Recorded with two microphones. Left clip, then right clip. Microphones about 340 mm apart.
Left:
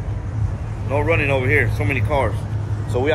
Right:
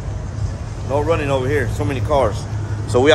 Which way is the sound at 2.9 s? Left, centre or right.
Right.